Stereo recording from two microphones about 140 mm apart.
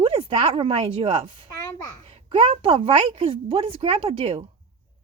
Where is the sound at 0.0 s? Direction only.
40° right (ahead or behind).